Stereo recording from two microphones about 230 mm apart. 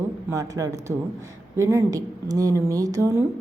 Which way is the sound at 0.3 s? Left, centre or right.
Centre.